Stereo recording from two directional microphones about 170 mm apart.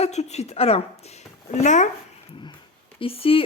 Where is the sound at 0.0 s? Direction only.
40° left (ahead or behind).